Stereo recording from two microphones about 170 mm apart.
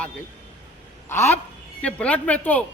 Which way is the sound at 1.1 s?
15° left (ahead or behind).